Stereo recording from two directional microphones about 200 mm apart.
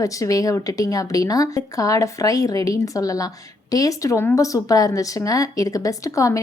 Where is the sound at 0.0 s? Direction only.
15° left (ahead or behind).